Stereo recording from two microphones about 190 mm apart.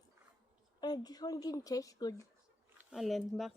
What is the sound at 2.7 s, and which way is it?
Speech, centre (ahead or behind).